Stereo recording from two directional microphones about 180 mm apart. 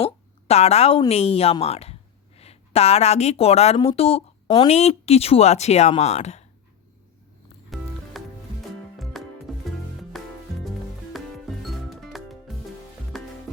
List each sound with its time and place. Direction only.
0.0 s a woman's voice: 35° left (ahead or behind)
7.7 s music: centre (ahead or behind)